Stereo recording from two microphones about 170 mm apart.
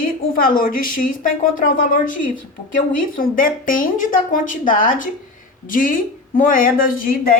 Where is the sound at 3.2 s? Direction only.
55° left (ahead or behind).